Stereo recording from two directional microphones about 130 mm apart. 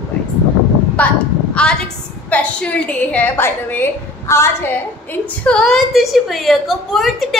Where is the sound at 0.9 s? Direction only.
10° left (ahead or behind).